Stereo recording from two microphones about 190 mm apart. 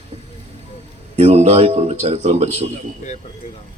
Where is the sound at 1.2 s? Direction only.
35° right (ahead or behind).